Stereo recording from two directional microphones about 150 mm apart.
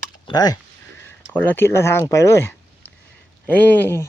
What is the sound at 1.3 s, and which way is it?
Speech, 15° left (ahead or behind).